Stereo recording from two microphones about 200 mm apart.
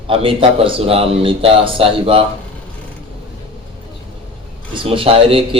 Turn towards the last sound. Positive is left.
turn(degrees=-25)  # may be behind; listen again after turning